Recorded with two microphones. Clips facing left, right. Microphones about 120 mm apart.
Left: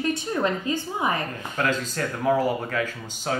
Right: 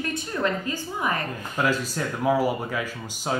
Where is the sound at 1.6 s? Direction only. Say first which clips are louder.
Right 1 dB; 10° right (ahead or behind).